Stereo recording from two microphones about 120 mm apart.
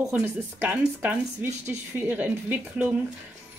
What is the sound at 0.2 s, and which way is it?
Speech, 15° right (ahead or behind).